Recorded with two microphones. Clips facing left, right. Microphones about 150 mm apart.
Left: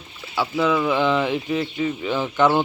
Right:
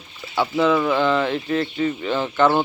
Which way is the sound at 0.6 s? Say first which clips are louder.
Right 1 dB; 5° left (ahead or behind).